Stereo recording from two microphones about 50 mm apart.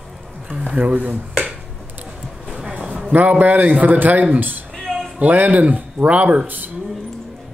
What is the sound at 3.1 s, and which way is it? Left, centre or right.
Speech, right.